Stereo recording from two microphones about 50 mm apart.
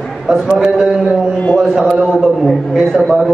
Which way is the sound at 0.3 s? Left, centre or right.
Centre.